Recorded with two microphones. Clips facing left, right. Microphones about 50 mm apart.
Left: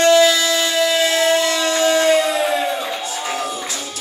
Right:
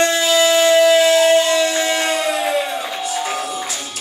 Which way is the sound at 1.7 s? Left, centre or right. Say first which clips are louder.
Left 3 dB; right.